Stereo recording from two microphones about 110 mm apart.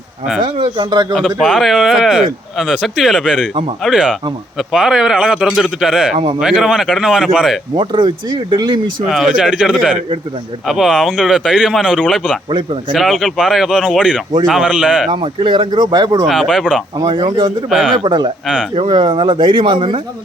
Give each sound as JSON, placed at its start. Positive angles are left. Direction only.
{"t": 0.4, "sound": "speech", "side_deg": -45}
{"t": 1.1, "sound": "speech", "side_deg": 0}
{"t": 7.8, "sound": "speech", "side_deg": -45}
{"t": 9.0, "sound": "speech", "side_deg": -5}
{"t": 15.1, "sound": "speech", "side_deg": -50}
{"t": 16.2, "sound": "speech", "side_deg": 0}
{"t": 18.0, "sound": "speech", "side_deg": -45}